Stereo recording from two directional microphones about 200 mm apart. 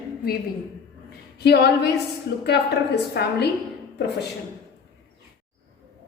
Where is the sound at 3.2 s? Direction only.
55° left (ahead or behind).